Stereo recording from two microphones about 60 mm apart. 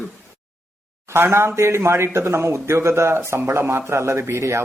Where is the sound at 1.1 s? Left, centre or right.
Right.